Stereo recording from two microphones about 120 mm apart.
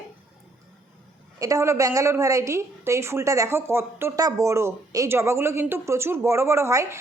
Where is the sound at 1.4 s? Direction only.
25° right (ahead or behind).